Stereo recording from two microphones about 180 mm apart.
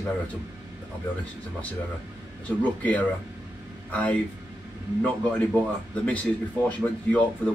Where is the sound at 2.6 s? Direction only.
10° left (ahead or behind).